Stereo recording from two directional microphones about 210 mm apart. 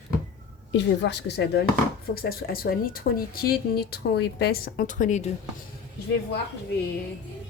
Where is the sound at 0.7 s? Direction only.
60° left (ahead or behind).